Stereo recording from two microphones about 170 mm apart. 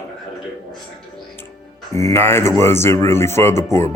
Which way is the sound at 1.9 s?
15° left (ahead or behind).